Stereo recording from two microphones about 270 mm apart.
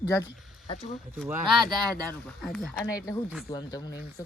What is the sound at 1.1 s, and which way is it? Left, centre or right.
Speech, centre.